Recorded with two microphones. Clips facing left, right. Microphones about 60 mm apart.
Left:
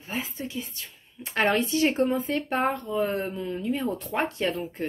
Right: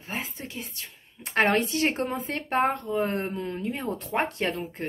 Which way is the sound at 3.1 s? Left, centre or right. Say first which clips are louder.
Left 1 dB; right.